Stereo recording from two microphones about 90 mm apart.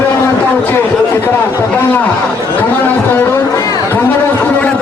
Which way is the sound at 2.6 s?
20° left (ahead or behind).